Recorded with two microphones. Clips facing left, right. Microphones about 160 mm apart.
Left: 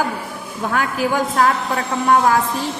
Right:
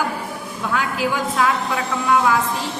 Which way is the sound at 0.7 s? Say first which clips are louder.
Left 2 dB; 50° left (ahead or behind).